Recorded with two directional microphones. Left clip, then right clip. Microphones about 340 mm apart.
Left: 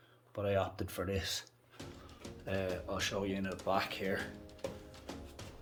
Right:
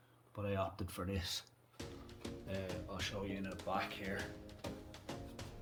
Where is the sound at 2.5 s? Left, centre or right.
Centre.